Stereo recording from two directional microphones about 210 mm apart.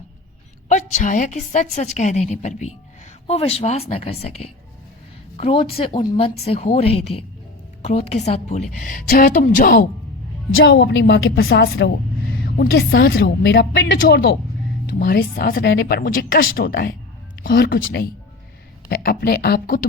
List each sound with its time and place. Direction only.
0.7 s a woman's voice: 35° left (ahead or behind)
10.5 s a woman's voice: 60° left (ahead or behind); by 13.1 s 45° left (ahead or behind)
13.1 s a woman's voice: 60° left (ahead or behind)